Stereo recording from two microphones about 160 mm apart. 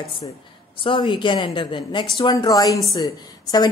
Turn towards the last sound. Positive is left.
turn(degrees=25)  # may be behind; listen again after turning